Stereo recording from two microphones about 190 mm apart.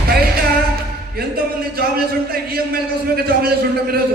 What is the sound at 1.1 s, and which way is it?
A man's voice, 55° right (ahead or behind).